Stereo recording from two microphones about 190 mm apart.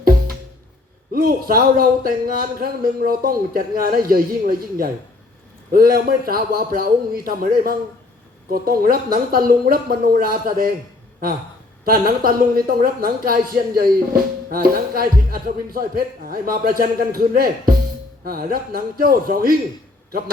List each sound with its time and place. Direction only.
1.1 s a woman's voice: 50° right (ahead or behind)
11.9 s a woman's voice: 50° right (ahead or behind)